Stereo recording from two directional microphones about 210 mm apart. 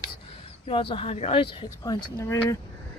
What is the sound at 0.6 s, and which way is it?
Speech, 25° left (ahead or behind).